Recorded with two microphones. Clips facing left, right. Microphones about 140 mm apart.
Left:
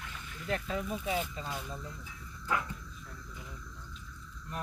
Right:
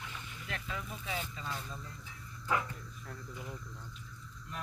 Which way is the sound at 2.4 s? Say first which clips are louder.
Even; centre (ahead or behind).